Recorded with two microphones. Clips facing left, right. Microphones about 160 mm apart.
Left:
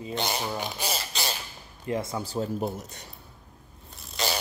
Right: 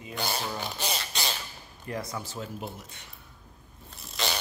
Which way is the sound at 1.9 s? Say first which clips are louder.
Left 5 dB; 25° left (ahead or behind).